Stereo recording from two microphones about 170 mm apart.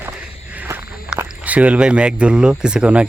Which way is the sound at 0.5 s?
10° right (ahead or behind).